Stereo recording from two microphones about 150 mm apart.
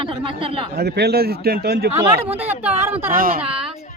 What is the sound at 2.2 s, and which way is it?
Speech, 40° right (ahead or behind).